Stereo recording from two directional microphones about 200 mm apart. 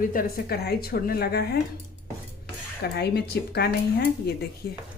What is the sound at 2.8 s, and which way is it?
Speech, 55° left (ahead or behind).